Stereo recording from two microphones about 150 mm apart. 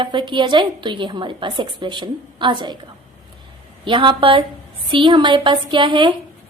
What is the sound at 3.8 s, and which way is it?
A woman's voice, 35° right (ahead or behind).